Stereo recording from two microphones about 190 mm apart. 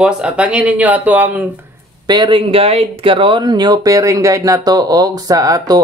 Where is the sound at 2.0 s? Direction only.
25° right (ahead or behind).